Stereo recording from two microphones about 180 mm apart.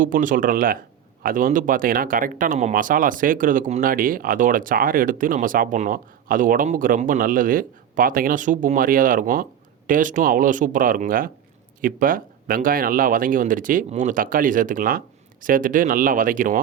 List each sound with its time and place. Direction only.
0.0 s speech: 45° right (ahead or behind)